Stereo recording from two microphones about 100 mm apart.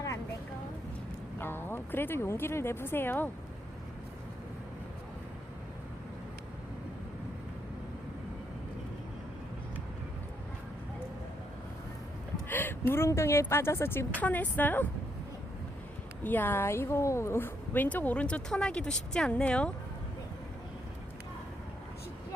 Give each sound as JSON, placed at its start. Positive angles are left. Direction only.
{"t": 1.4, "sound": "speech", "side_deg": 20}
{"t": 12.5, "sound": "a sound", "side_deg": 20}
{"t": 12.9, "sound": "a woman's voice", "side_deg": 25}
{"t": 16.2, "sound": "a woman's voice", "side_deg": 20}